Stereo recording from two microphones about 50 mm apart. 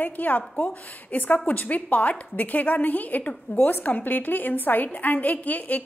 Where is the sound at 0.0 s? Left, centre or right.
Left.